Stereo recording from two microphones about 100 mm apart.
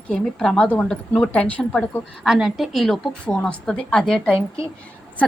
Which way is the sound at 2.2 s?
5° right (ahead or behind).